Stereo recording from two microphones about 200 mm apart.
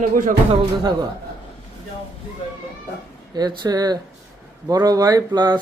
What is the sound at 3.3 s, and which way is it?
Speech, 20° right (ahead or behind).